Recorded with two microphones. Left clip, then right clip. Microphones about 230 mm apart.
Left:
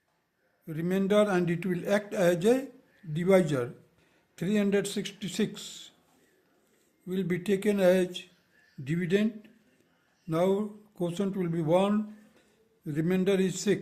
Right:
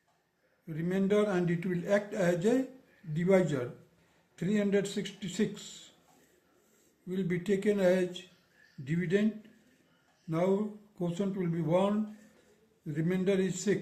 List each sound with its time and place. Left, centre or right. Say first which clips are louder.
0.7 s speech: left 3 dB; left
7.1 s speech: left 3 dB; left